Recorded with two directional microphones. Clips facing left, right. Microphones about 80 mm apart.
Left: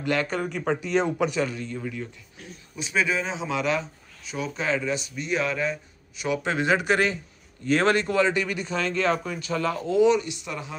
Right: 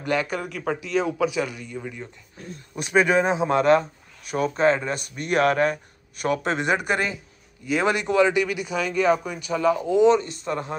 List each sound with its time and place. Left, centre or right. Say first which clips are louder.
0.0 s speech: right 1 dB; centre
0.4 s speech: left 1 dB; centre
2.7 s a man's voice: right 6 dB; right
7.6 s speech: left 1 dB; centre
10.0 s speech: right 3 dB; right